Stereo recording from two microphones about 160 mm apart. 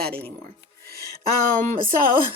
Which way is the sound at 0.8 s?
70° right (ahead or behind).